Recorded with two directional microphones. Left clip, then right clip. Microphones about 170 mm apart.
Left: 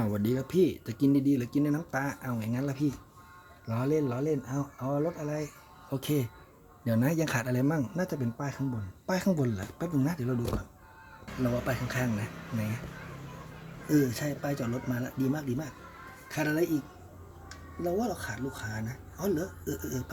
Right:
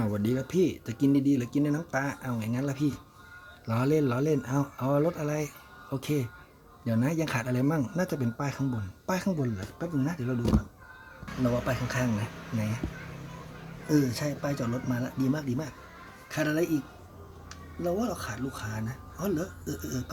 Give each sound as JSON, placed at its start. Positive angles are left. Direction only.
{"t": 0.0, "sound": "speech", "side_deg": 5}
{"t": 3.7, "sound": "speech", "side_deg": -20}
{"t": 5.9, "sound": "speech", "side_deg": 10}
{"t": 9.0, "sound": "speech", "side_deg": 10}
{"t": 9.3, "sound": "speech", "side_deg": 25}
{"t": 11.6, "sound": "speech", "side_deg": -10}
{"t": 13.8, "sound": "speech", "side_deg": -10}